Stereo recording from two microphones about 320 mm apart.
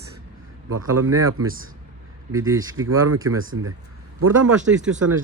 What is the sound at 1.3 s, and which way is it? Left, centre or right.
Speech, right.